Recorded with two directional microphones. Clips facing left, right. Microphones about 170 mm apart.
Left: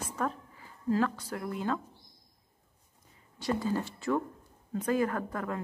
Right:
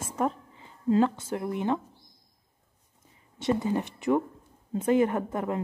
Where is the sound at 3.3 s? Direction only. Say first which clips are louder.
Right 4 dB; 20° right (ahead or behind).